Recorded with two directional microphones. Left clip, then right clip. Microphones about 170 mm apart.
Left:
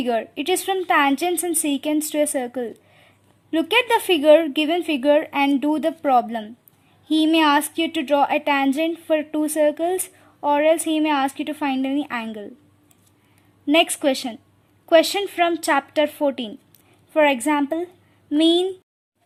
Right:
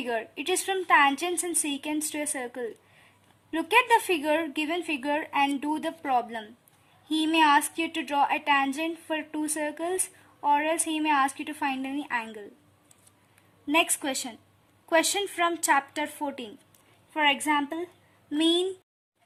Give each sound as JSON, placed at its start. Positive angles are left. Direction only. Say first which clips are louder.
{"t": 0.0, "sound": "a woman's voice", "louder": "left 8 dB", "side_deg": 50}
{"t": 13.7, "sound": "a woman's voice", "louder": "left 8 dB", "side_deg": 40}